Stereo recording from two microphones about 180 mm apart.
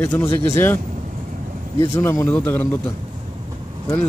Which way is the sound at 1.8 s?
15° left (ahead or behind).